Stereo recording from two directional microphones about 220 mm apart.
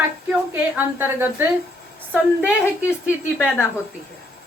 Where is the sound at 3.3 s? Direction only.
5° left (ahead or behind).